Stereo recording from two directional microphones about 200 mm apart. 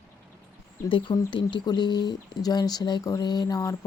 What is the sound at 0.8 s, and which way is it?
Speech, 20° left (ahead or behind).